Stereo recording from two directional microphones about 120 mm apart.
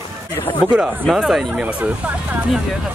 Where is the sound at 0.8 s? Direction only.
5° right (ahead or behind).